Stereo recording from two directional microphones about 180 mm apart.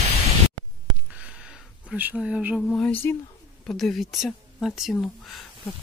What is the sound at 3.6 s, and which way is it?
Speech, centre (ahead or behind).